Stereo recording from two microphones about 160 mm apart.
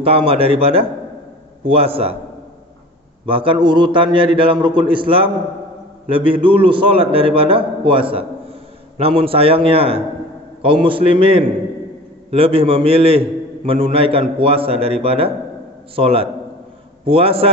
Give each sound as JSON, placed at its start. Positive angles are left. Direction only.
{"t": 0.0, "sound": "a man's voice", "side_deg": -35}
{"t": 3.3, "sound": "a man's voice", "side_deg": -35}